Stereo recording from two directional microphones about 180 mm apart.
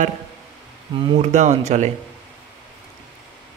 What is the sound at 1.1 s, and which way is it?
Speech, 40° right (ahead or behind).